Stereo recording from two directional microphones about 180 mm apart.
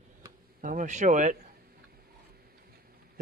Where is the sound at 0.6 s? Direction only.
45° right (ahead or behind).